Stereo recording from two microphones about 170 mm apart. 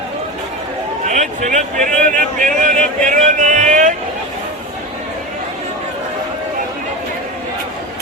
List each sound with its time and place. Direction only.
1.0 s speech: 45° right (ahead or behind)